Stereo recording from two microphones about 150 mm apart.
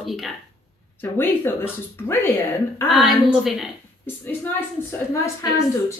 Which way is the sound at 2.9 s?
5° right (ahead or behind).